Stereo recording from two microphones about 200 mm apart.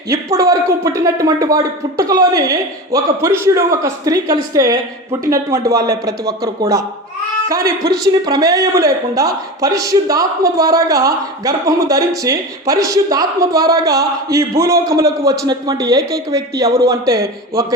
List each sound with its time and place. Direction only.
0.1 s speech: 15° right (ahead or behind)